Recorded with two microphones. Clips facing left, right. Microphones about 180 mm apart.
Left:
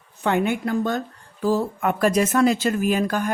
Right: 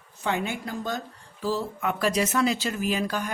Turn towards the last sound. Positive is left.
turn(degrees=50)  # may be behind; listen again after turning